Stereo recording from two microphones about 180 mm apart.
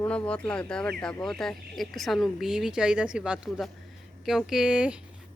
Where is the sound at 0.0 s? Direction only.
5° left (ahead or behind).